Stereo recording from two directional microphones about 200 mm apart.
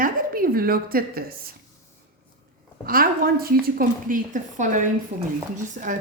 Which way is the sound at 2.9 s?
45° right (ahead or behind).